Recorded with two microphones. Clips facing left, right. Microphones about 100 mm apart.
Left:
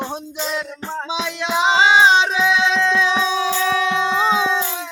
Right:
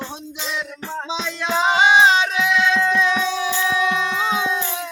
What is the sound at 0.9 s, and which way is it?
Music, 15° left (ahead or behind).